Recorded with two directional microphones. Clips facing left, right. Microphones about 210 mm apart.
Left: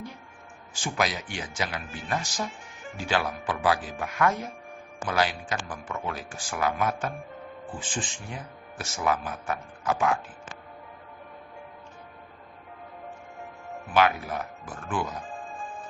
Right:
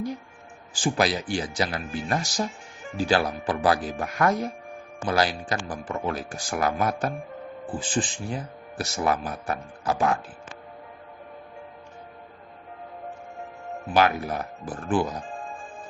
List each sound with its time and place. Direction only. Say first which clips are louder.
0.7 s speech: right 5 dB; 35° right (ahead or behind)
13.9 s speech: right 2 dB; 35° right (ahead or behind)